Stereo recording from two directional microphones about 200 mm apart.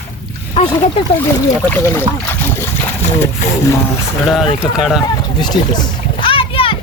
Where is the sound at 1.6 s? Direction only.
10° left (ahead or behind).